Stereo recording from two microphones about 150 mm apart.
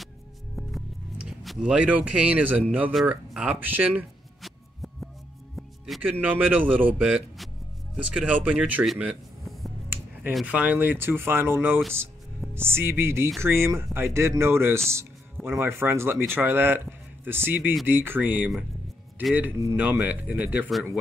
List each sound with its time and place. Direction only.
0.6 s music: centre (ahead or behind)
2.9 s a sound: 5° right (ahead or behind)
5.6 s music: centre (ahead or behind)
6.2 s speech: 10° right (ahead or behind)
10.3 s speech: 10° right (ahead or behind)
20.6 s speech: 5° left (ahead or behind)